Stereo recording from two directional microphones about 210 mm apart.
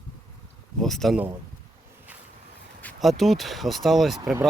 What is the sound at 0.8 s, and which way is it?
Speech, centre (ahead or behind).